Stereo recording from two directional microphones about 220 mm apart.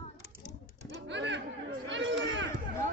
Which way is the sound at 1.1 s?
55° right (ahead or behind).